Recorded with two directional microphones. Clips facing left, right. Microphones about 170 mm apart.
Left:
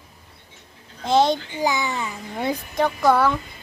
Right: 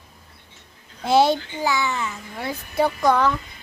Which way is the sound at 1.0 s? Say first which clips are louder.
Right 1 dB; 5° right (ahead or behind).